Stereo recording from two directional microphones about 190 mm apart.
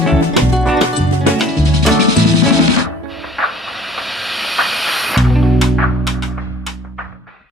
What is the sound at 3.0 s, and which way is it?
Hiss, centre (ahead or behind).